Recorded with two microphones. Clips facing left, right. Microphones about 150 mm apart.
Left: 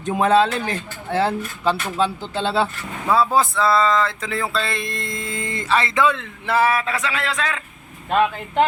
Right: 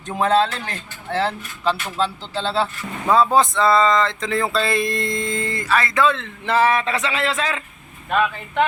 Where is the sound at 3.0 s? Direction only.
5° left (ahead or behind); by 6.0 s 25° left (ahead or behind).